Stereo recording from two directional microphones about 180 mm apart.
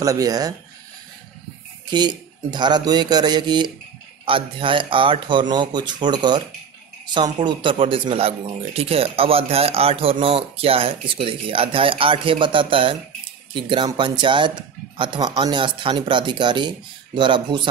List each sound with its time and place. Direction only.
0.0 s speech: 20° right (ahead or behind)
1.9 s speech: 25° right (ahead or behind)